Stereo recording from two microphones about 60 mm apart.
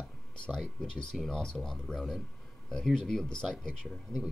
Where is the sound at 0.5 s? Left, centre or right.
Centre.